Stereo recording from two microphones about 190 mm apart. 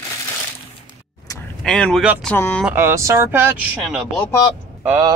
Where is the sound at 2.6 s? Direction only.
10° right (ahead or behind).